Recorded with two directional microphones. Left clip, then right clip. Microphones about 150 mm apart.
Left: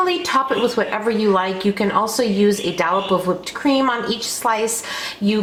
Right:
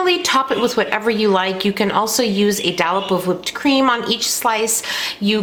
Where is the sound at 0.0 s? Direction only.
35° right (ahead or behind).